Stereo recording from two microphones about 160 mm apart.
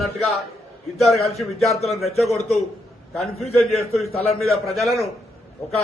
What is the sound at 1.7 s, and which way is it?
Speech, 40° left (ahead or behind).